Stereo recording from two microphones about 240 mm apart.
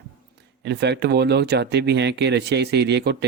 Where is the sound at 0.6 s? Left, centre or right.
Right.